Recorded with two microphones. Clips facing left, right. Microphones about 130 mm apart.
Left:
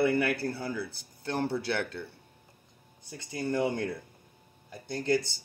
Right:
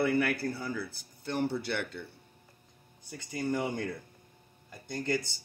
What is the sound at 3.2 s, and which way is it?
Speech, 70° left (ahead or behind).